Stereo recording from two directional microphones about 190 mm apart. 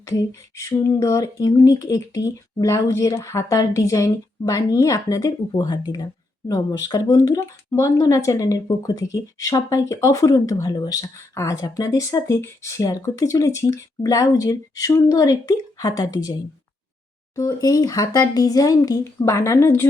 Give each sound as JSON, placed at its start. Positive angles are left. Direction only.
{"t": 0.0, "sound": "speech", "side_deg": 15}